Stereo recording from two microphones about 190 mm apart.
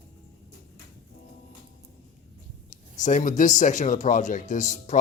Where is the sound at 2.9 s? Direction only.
40° left (ahead or behind).